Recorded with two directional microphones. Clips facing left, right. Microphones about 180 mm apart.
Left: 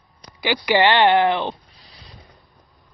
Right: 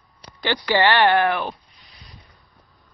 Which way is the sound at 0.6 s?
15° left (ahead or behind).